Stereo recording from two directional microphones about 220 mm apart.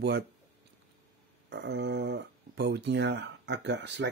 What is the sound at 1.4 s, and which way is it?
Speech, 50° right (ahead or behind).